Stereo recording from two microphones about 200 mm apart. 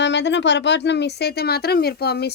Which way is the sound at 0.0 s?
60° left (ahead or behind).